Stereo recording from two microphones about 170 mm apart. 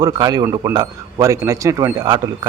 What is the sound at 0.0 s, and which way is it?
A man's voice, 20° right (ahead or behind).